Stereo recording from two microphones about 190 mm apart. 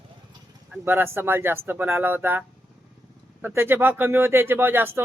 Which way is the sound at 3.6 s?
10° right (ahead or behind).